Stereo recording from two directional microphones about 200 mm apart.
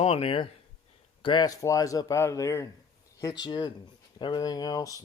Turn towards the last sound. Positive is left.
turn(degrees=20)  # may be behind; listen again after turning